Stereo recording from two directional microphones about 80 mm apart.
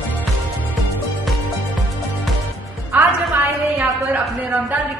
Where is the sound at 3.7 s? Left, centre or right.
Right.